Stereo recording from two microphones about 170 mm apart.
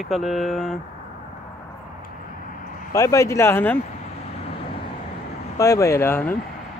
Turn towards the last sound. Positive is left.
turn(degrees=10)  # may be behind; listen again after turning